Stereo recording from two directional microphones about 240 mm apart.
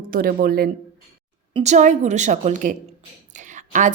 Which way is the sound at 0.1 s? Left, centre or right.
Right.